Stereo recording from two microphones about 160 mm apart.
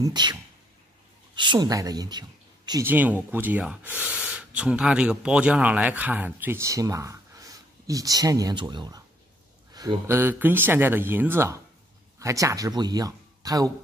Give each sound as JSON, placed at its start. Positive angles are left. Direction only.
{"t": 0.0, "sound": "speech", "side_deg": -25}
{"t": 2.8, "sound": "speech", "side_deg": -10}
{"t": 10.0, "sound": "speech", "side_deg": -15}